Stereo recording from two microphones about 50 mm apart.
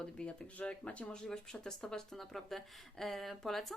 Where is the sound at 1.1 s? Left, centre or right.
Centre.